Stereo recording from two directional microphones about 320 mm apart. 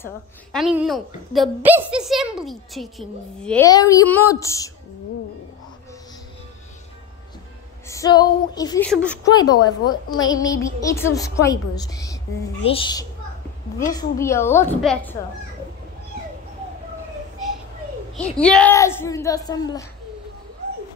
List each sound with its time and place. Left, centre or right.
0.0 s a woman's voice: centre
7.9 s a woman's voice: centre
18.1 s a woman's voice: centre